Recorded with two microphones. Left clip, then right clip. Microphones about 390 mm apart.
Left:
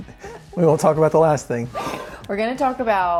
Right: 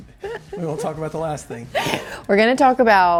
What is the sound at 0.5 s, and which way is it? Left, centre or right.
Speech, left.